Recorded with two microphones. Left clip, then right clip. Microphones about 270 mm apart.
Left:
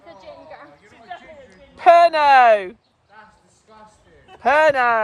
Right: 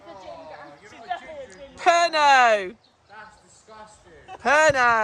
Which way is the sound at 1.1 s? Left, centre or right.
Right.